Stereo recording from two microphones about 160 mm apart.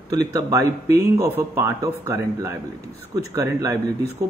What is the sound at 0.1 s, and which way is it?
Speech, 20° right (ahead or behind).